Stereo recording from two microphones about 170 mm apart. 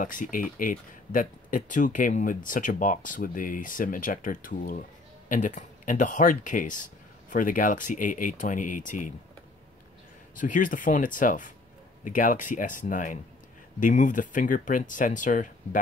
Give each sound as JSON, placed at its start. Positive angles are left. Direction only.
{"t": 0.0, "sound": "speech", "side_deg": 50}
{"t": 10.3, "sound": "speech", "side_deg": 50}